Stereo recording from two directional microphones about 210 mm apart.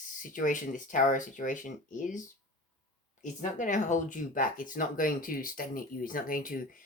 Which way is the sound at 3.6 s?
35° left (ahead or behind).